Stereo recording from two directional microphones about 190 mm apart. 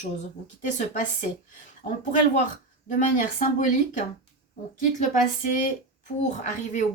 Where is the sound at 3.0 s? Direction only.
45° left (ahead or behind).